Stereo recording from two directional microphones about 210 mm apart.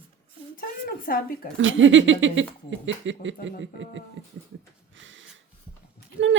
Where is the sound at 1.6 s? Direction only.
65° right (ahead or behind).